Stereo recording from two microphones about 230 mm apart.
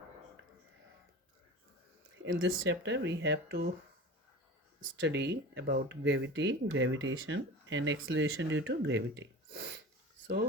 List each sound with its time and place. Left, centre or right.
2.1 s speech: right
4.9 s speech: right